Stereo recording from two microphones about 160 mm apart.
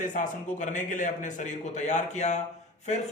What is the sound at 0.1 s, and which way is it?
A man's voice, 50° left (ahead or behind).